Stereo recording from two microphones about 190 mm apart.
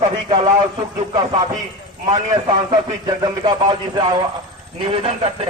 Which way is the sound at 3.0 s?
25° right (ahead or behind).